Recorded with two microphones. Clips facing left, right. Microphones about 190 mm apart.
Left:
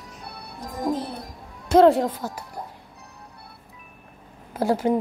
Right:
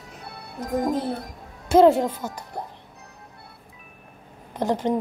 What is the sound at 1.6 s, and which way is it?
Speech, centre (ahead or behind).